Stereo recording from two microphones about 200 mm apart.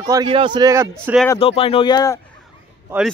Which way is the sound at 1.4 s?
30° left (ahead or behind).